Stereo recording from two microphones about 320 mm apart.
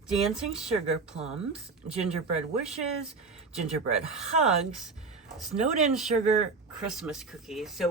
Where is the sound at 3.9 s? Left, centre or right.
Centre.